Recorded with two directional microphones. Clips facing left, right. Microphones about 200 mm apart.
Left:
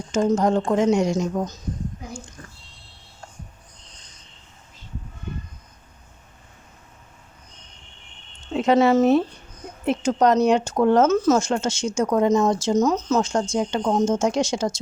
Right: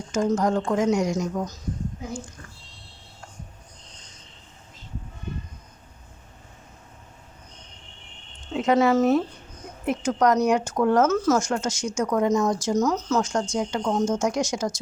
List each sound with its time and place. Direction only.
0.1 s speech: 25° left (ahead or behind)
8.5 s speech: 30° left (ahead or behind)